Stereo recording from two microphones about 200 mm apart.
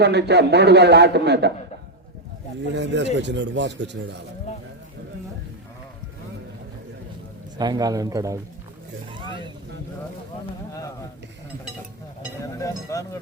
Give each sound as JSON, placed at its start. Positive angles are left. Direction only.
{"t": 0.0, "sound": "a man's voice", "side_deg": -55}
{"t": 2.7, "sound": "a man's voice", "side_deg": -60}
{"t": 7.6, "sound": "speech", "side_deg": -20}
{"t": 9.1, "sound": "vehicle", "side_deg": -25}
{"t": 10.7, "sound": "speech", "side_deg": 15}
{"t": 12.4, "sound": "speech", "side_deg": 15}